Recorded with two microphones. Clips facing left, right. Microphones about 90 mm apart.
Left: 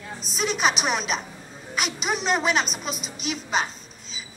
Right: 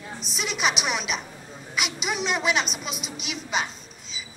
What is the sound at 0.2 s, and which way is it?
A woman's voice, 40° left (ahead or behind).